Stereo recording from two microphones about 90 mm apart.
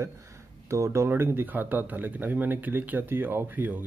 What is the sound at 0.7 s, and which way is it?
Speech, 35° right (ahead or behind).